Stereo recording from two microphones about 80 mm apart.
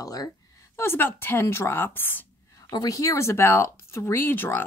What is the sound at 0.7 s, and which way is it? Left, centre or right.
Speech, left.